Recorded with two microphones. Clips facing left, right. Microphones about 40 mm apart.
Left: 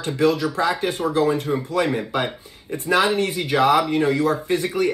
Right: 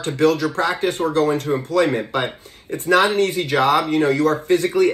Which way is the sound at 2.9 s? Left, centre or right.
Right.